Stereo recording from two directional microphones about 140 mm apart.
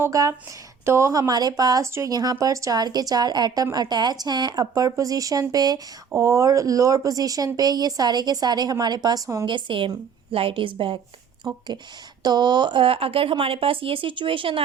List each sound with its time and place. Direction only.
0.0 s speech: 20° right (ahead or behind)
9.5 s speech: 35° right (ahead or behind)